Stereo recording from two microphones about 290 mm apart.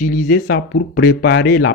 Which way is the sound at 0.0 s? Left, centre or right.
Left.